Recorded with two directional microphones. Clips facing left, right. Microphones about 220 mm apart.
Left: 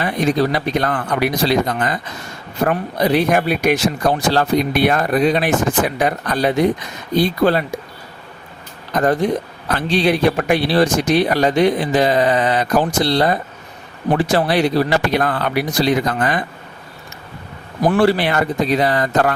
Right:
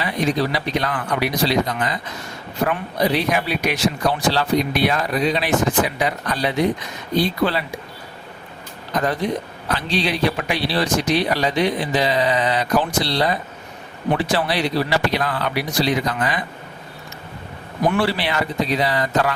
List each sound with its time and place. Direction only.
0.0 s speech: 50° left (ahead or behind)
9.2 s speech: 45° left (ahead or behind)
17.8 s speech: 45° left (ahead or behind)